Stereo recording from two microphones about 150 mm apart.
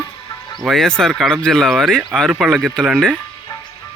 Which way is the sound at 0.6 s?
Centre (ahead or behind).